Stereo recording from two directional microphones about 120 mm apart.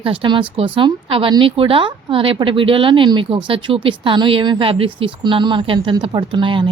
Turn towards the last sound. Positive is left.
turn(degrees=-45)  # may be behind; listen again after turning